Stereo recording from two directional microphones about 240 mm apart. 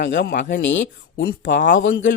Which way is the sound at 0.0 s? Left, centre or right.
Left.